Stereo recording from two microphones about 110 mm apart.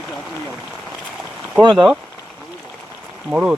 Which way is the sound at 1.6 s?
45° right (ahead or behind).